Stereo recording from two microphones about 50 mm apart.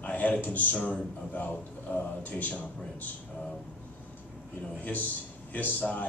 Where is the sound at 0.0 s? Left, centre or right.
Left.